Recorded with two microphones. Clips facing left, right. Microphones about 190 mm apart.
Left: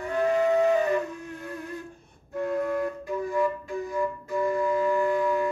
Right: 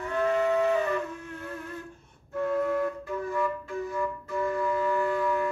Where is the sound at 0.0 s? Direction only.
15° left (ahead or behind).